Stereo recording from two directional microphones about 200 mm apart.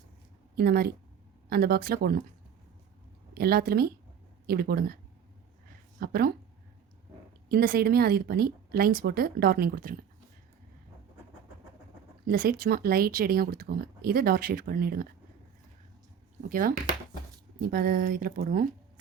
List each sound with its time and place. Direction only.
0.5 s speech: 50° right (ahead or behind)
3.3 s speech: 50° right (ahead or behind)
6.0 s speech: 50° right (ahead or behind)
7.5 s speech: 50° right (ahead or behind)
12.3 s speech: 45° right (ahead or behind)
16.5 s speech: 45° right (ahead or behind)